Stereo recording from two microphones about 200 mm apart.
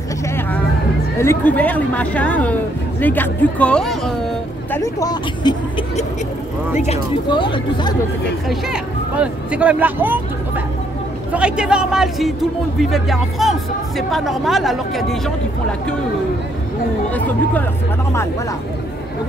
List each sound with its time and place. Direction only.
1.1 s speech: 15° left (ahead or behind)
4.6 s speech: 15° left (ahead or behind)
6.9 s speech: 25° left (ahead or behind)
8.5 s speech: 5° right (ahead or behind)